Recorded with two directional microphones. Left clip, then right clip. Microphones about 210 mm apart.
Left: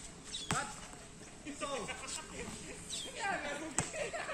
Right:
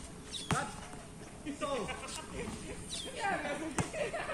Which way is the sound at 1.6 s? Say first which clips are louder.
Right 3 dB; centre (ahead or behind).